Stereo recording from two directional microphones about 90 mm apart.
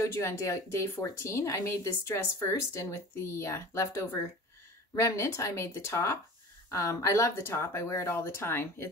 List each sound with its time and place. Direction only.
0.0 s speech: 30° left (ahead or behind)